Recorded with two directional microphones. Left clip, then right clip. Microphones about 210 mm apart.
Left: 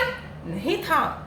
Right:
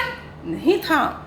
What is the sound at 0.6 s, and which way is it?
Speech, 35° right (ahead or behind).